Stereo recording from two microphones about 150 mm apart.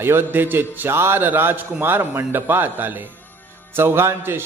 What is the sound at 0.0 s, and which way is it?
A man's voice, 15° right (ahead or behind).